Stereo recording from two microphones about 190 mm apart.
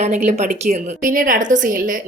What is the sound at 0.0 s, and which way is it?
A woman's voice, 35° right (ahead or behind).